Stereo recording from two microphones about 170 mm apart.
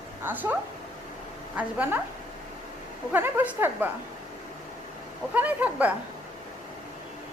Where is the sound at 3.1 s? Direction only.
10° right (ahead or behind).